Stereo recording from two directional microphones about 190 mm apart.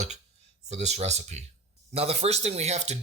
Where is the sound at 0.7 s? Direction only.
35° right (ahead or behind).